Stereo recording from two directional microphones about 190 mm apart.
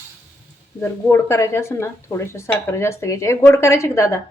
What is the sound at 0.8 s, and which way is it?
Speech, 15° left (ahead or behind).